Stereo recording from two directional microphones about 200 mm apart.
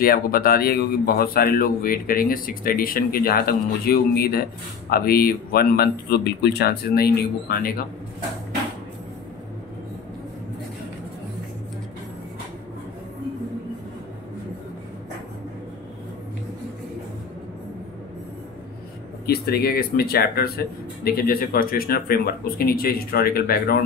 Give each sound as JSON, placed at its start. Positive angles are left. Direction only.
{"t": 0.0, "sound": "a man's voice", "side_deg": 50}
{"t": 19.2, "sound": "a man's voice", "side_deg": 50}